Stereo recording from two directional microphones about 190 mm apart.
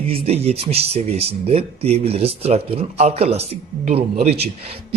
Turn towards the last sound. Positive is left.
turn(degrees=-30)  # may be behind; listen again after turning